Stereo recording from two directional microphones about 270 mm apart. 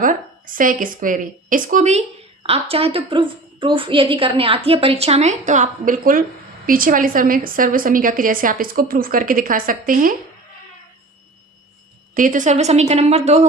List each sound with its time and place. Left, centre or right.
0.0 s a woman's voice: right
12.1 s a woman's voice: right